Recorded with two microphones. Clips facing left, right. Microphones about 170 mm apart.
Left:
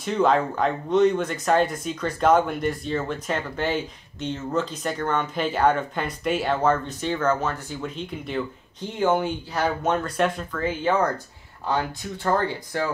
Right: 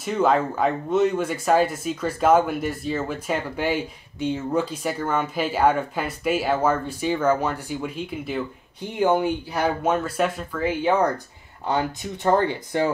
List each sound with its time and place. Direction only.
0.0 s speech: 5° right (ahead or behind); by 12.9 s 20° right (ahead or behind)